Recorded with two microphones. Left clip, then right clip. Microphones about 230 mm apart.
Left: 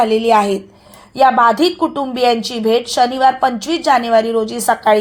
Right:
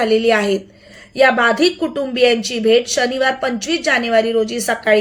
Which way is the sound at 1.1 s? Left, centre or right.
Left.